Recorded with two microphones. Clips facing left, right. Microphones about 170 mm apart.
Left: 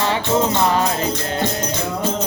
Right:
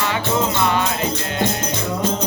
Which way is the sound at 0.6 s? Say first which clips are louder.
Left 2 dB; 35° left (ahead or behind).